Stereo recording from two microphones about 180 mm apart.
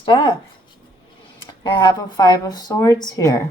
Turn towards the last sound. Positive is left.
turn(degrees=20)  # may be behind; listen again after turning